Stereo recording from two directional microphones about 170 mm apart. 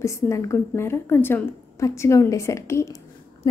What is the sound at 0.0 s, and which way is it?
A woman's voice, 15° left (ahead or behind).